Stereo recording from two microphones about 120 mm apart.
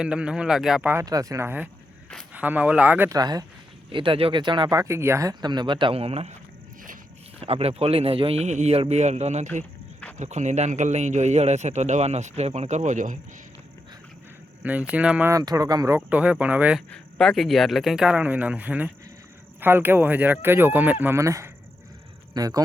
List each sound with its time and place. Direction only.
0.0 s speech: 10° right (ahead or behind)
1.0 s speech: 30° right (ahead or behind); by 3.1 s 15° right (ahead or behind)
3.1 s speech: 35° right (ahead or behind)
3.9 s a man's voice: 45° right (ahead or behind)
4.9 s speech: 20° right (ahead or behind)
5.3 s a man's voice: 35° right (ahead or behind); by 6.3 s 60° right (ahead or behind)
7.3 s a man's voice: 55° right (ahead or behind)
10.2 s a man's voice: 80° right
14.6 s speech: 15° right (ahead or behind)
15.3 s speech: 30° right (ahead or behind)
16.0 s speech: 10° right (ahead or behind)
16.9 s speech: 5° left (ahead or behind); by 22.6 s 30° right (ahead or behind)